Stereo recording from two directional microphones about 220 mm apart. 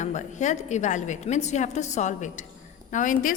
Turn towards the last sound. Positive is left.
turn(degrees=35)  # may be behind; listen again after turning